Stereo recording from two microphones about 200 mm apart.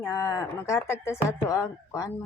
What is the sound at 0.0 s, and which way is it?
A woman's voice, 15° left (ahead or behind).